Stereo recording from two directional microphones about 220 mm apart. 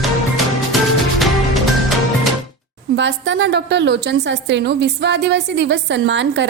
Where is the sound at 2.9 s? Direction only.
55° right (ahead or behind).